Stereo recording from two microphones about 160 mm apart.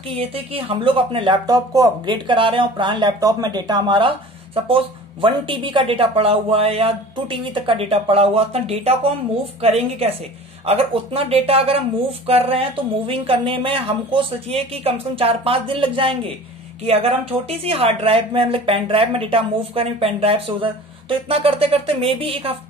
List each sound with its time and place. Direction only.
0.1 s speech: 35° right (ahead or behind)